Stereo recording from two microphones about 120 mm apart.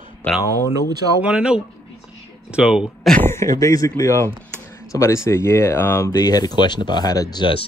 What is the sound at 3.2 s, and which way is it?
Speech, 25° left (ahead or behind).